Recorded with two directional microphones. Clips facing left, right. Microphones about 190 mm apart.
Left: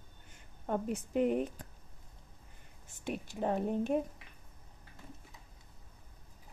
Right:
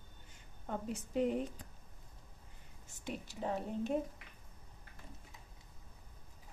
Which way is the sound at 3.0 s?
55° left (ahead or behind).